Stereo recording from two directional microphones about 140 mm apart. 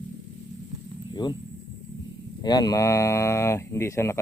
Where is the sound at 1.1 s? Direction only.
30° left (ahead or behind).